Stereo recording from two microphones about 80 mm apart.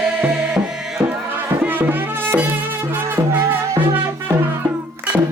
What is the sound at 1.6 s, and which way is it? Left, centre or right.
Music, right.